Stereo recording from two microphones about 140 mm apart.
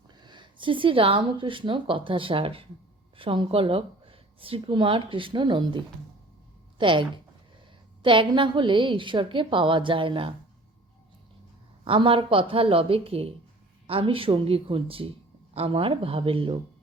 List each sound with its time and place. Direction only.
0.1 s a woman's voice: 30° right (ahead or behind)
11.9 s speech: 40° right (ahead or behind)